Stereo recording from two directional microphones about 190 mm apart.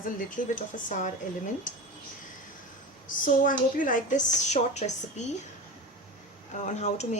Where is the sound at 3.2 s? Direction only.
45° left (ahead or behind).